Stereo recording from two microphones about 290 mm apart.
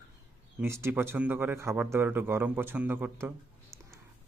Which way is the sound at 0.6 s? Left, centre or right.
Centre.